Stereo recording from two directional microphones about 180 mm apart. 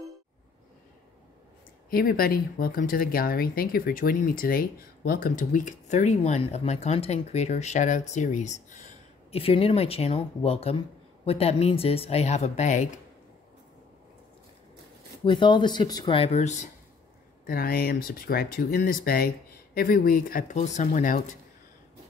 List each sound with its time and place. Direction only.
1.9 s speech: 55° left (ahead or behind)
15.2 s speech: 25° left (ahead or behind)
17.5 s speech: 55° left (ahead or behind)